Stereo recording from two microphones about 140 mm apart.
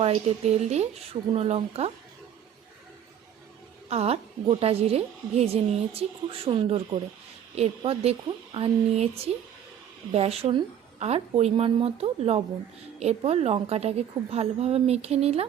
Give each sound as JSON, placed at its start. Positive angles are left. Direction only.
{"t": 0.0, "sound": "a woman's voice", "side_deg": -45}
{"t": 3.8, "sound": "a woman's voice", "side_deg": -50}